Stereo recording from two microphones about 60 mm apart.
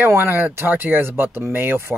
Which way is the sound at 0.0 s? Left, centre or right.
Right.